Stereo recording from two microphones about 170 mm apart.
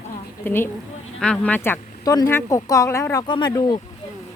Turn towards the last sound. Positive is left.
turn(degrees=25)  # may be behind; listen again after turning